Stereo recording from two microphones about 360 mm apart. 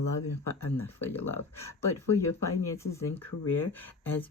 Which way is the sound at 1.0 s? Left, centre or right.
Centre.